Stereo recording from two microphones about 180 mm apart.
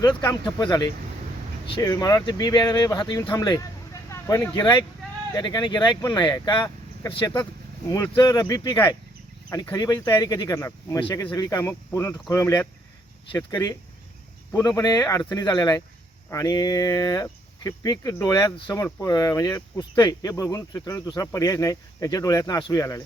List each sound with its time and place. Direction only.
0.4 s speech: 25° left (ahead or behind)
14.8 s speech: 20° left (ahead or behind)